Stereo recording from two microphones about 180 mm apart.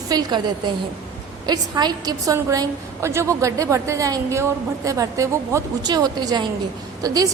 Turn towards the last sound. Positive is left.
turn(degrees=-20)  # may be behind; listen again after turning